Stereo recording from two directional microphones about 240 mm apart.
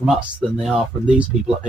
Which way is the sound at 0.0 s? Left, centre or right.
Centre.